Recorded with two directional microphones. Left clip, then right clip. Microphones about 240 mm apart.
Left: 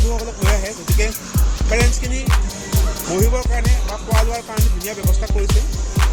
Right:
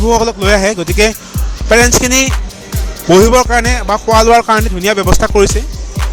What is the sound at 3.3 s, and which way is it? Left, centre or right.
Music, right.